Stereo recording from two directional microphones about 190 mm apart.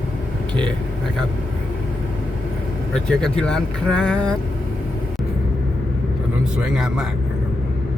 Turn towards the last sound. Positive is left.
turn(degrees=-5)  # may be behind; listen again after turning